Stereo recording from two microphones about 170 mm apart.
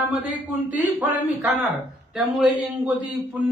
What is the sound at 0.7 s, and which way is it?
Speech, 10° right (ahead or behind).